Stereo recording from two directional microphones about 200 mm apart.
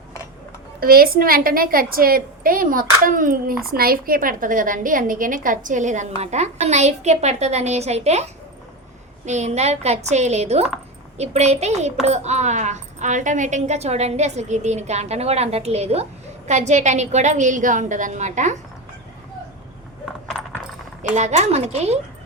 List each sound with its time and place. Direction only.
0.8 s a woman's voice: 50° right (ahead or behind)
21.2 s a woman's voice: 35° right (ahead or behind)